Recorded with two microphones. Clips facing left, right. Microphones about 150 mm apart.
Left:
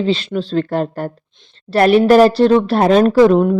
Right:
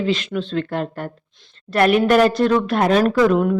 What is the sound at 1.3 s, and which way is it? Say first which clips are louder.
A woman's voice: left 4 dB; 25° left (ahead or behind).